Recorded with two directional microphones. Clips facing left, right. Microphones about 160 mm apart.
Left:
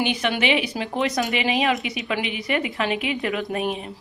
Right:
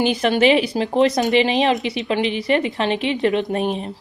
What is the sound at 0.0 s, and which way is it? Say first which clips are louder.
Speech: right 7 dB; 35° right (ahead or behind).